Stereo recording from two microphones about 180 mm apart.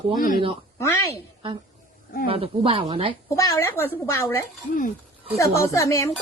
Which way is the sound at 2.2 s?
30° right (ahead or behind).